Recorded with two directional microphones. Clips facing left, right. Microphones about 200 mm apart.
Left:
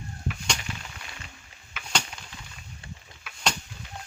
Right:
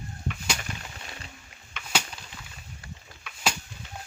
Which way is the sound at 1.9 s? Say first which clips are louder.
Even; 5° right (ahead or behind).